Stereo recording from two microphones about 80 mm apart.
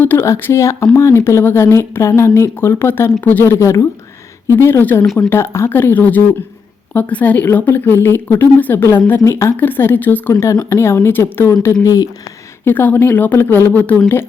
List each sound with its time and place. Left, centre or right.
0.2 s speech: left
10.5 s speech: left